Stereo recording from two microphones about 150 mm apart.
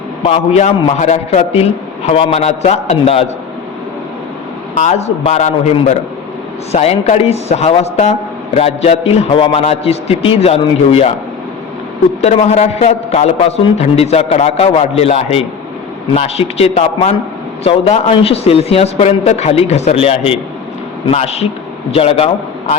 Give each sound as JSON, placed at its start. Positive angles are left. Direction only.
{"t": 0.5, "sound": "a man's voice", "side_deg": 50}
{"t": 4.8, "sound": "a man's voice", "side_deg": 50}
{"t": 12.2, "sound": "a man's voice", "side_deg": 50}